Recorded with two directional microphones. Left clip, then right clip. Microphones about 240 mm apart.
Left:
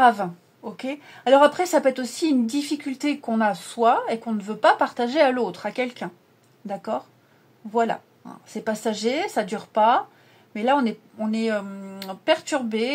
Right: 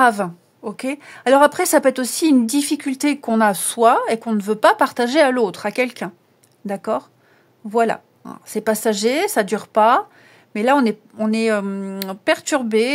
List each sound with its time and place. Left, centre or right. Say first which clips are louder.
0.0 s speech: right 2 dB; right